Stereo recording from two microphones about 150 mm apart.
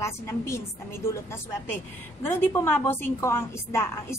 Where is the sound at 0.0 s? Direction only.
20° left (ahead or behind).